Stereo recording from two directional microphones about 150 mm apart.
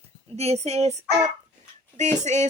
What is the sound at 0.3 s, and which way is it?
Speech, 45° right (ahead or behind).